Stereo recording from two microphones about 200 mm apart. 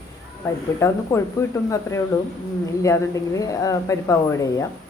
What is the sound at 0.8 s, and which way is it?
Speech, 15° left (ahead or behind).